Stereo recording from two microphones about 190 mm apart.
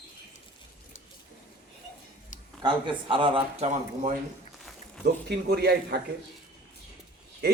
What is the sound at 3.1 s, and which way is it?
A man's voice, 25° right (ahead or behind).